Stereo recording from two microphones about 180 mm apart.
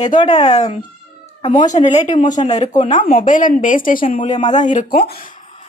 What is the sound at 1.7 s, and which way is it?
A woman's voice, 40° left (ahead or behind).